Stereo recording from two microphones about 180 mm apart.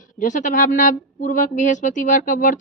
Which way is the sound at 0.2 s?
45° left (ahead or behind).